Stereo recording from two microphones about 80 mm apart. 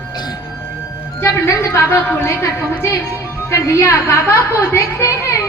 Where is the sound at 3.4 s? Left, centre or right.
Left.